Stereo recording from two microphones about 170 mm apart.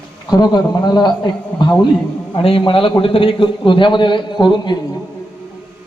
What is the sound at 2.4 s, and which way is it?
A man's voice, 30° left (ahead or behind).